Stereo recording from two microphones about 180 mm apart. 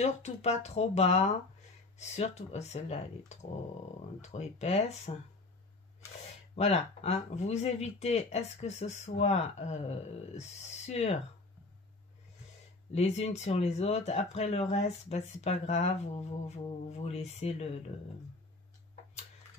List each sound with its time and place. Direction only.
0.0 s speech: 35° left (ahead or behind)
6.5 s speech: 35° left (ahead or behind)
12.9 s speech: 35° left (ahead or behind)